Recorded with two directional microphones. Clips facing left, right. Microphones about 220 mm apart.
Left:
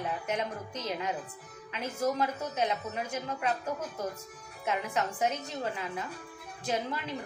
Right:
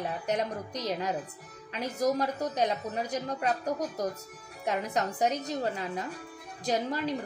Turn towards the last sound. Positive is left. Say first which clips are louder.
# right 4 dB
turn(degrees=-35)  # may be behind; listen again after turning